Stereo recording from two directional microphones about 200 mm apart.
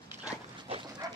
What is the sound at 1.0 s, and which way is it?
Dog, 20° right (ahead or behind).